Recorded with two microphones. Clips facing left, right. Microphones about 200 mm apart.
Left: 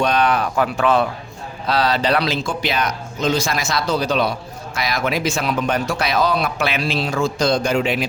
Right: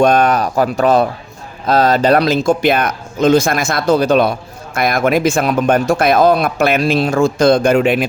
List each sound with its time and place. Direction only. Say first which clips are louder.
0.0 s a man's voice: right 6 dB; 45° right (ahead or behind)